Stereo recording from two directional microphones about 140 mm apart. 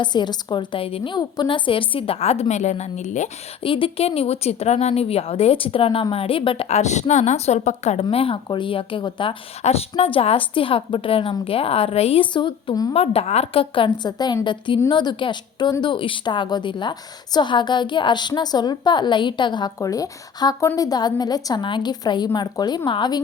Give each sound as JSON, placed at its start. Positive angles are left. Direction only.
{"t": 0.0, "sound": "a woman's voice", "side_deg": 30}
{"t": 3.6, "sound": "speech", "side_deg": 40}
{"t": 8.0, "sound": "a woman's voice", "side_deg": 40}
{"t": 12.9, "sound": "a woman's voice", "side_deg": 45}